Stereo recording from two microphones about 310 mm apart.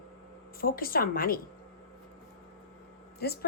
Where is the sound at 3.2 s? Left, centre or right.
Left.